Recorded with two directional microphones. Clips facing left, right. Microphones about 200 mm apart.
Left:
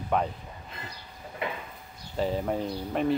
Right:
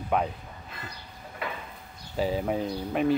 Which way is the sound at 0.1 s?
5° right (ahead or behind).